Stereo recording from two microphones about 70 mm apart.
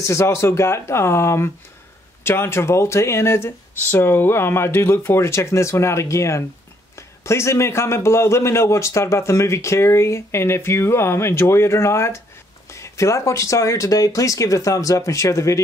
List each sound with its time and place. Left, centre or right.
0.0 s a man's voice: left